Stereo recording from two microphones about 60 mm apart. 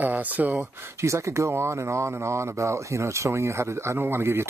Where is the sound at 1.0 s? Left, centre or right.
Right.